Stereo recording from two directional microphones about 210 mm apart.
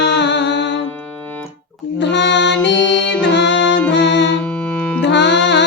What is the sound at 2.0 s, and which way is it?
Music, 55° left (ahead or behind).